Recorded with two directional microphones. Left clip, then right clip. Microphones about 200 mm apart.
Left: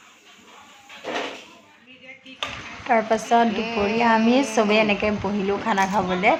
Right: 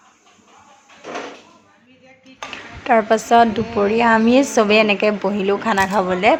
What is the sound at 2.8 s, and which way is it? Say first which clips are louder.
A woman's voice: right 5 dB; 20° right (ahead or behind).